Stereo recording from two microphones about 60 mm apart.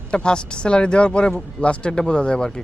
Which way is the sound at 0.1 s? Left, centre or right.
Centre.